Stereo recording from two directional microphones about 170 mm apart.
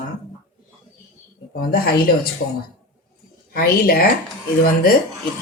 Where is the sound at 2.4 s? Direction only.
75° left (ahead or behind).